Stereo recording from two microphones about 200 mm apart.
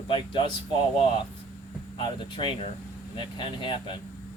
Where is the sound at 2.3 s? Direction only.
25° left (ahead or behind).